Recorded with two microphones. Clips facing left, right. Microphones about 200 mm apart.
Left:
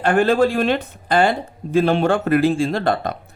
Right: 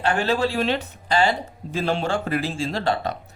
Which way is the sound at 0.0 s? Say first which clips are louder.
Left 6 dB; 50° left (ahead or behind).